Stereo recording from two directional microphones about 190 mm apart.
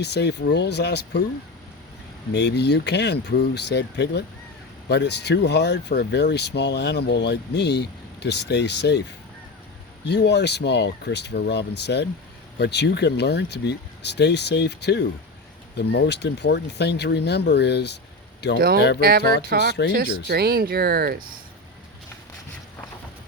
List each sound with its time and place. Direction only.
0.0 s speech: 60° left (ahead or behind)
2.3 s speech: 65° left (ahead or behind)
10.1 s speech: 60° left (ahead or behind)
18.9 s music: 55° right (ahead or behind)
19.9 s speech: 55° right (ahead or behind)